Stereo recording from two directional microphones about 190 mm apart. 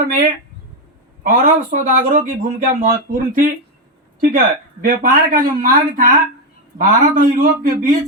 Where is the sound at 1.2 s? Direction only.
45° right (ahead or behind).